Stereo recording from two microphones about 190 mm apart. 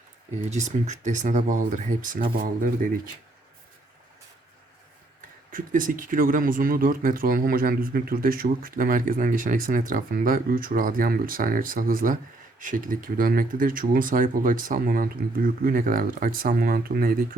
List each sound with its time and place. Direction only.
0.5 s speech: 40° right (ahead or behind)
5.5 s speech: 45° right (ahead or behind)